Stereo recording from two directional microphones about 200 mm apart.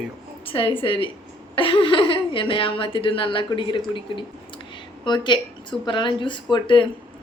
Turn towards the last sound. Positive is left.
turn(degrees=25)  # may be behind; listen again after turning